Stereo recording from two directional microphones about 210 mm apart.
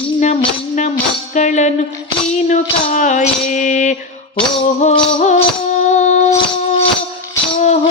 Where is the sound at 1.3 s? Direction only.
35° left (ahead or behind).